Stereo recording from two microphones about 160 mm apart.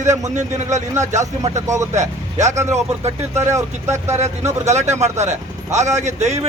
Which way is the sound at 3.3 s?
15° right (ahead or behind).